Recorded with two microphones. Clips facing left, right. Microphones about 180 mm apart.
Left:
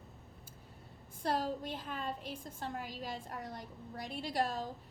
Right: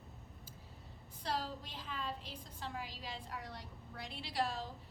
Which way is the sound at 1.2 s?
50° left (ahead or behind).